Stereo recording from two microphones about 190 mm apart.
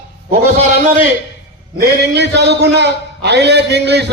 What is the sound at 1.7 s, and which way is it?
A man's voice, 60° right (ahead or behind).